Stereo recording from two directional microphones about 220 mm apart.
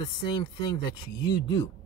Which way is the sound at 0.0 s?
20° left (ahead or behind).